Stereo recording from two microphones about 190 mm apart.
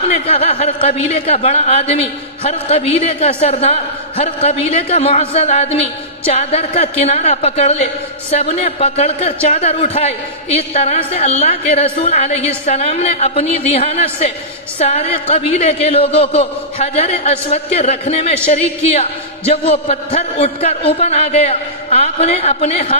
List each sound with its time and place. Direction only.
0.1 s a woman's voice: 30° left (ahead or behind)